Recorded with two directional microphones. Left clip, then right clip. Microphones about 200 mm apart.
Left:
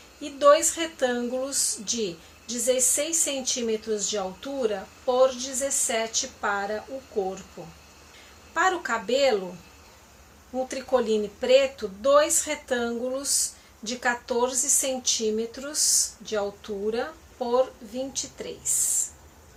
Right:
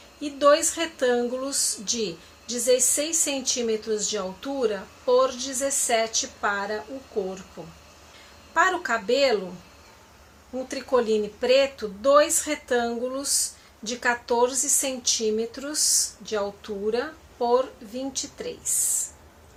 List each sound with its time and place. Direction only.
0.2 s speech: centre (ahead or behind)
8.5 s speech: centre (ahead or behind)
10.7 s speech: centre (ahead or behind)